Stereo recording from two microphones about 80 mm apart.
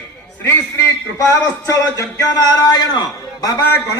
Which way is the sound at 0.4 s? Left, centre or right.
Left.